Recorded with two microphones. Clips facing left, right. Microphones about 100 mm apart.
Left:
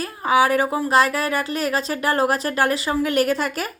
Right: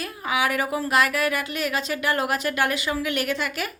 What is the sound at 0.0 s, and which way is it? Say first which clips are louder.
A woman's voice: left 7 dB; 35° left (ahead or behind).